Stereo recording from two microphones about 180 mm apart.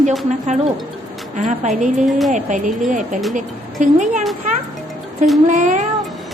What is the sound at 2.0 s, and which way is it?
Speech, centre (ahead or behind).